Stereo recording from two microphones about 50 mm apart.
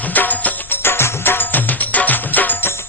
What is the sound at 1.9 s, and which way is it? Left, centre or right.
Music, left.